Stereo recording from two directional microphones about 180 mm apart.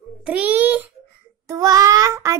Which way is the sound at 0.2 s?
5° right (ahead or behind).